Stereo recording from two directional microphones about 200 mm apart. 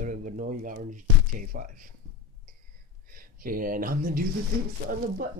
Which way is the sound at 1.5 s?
45° right (ahead or behind).